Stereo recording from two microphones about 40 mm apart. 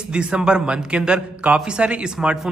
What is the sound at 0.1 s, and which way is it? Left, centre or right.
Speech, right.